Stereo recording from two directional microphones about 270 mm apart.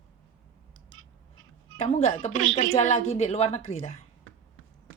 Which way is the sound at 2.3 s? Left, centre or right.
Right.